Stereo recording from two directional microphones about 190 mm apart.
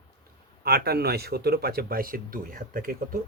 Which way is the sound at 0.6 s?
55° right (ahead or behind).